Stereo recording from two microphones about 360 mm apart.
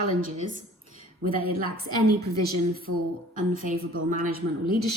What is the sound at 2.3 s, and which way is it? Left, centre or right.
Speech, centre.